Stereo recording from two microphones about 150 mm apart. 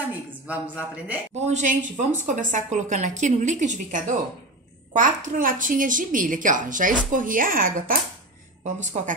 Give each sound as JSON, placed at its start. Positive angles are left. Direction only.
{"t": 0.5, "sound": "speech", "side_deg": -10}
{"t": 1.4, "sound": "a woman's voice", "side_deg": -55}
{"t": 8.6, "sound": "a woman's voice", "side_deg": -55}